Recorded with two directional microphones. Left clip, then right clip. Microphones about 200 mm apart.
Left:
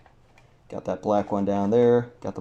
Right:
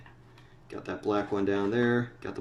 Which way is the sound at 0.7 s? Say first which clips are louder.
Left 6 dB; 25° left (ahead or behind).